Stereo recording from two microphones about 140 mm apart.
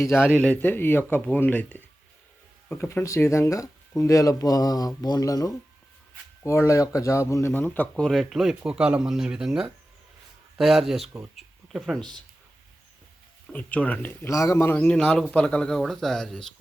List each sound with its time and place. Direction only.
0.0 s speech: 15° left (ahead or behind)
11.3 s a sound: centre (ahead or behind)
13.5 s speech: 10° left (ahead or behind)
14.8 s speech: 10° left (ahead or behind)